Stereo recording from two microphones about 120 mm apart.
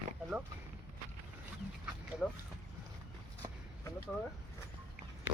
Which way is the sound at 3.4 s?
30° right (ahead or behind).